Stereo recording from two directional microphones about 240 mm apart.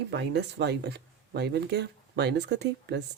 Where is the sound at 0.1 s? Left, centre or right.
Right.